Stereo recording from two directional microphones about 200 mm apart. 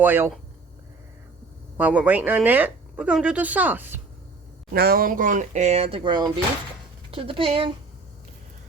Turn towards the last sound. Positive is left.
turn(degrees=-25)  # may be behind; listen again after turning